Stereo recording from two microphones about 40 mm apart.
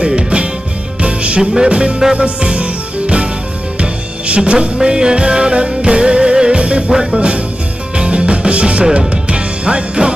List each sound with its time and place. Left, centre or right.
0.0 s music: right
1.4 s music: centre
7.2 s music: right